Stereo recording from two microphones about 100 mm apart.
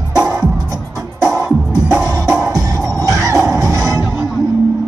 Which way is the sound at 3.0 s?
35° right (ahead or behind).